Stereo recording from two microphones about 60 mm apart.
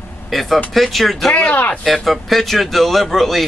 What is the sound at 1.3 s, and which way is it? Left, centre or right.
Speech, left.